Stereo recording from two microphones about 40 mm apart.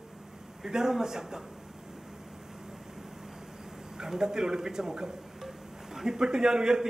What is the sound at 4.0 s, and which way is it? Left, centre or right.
A man's voice, centre.